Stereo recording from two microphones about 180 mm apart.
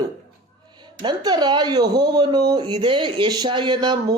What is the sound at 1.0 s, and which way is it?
Speech, 25° right (ahead or behind).